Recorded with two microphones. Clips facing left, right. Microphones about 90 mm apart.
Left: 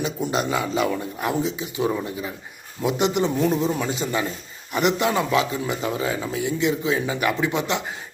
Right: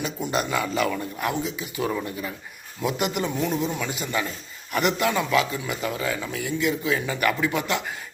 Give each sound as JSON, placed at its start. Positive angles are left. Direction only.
{"t": 0.3, "sound": "a man's voice", "side_deg": 25}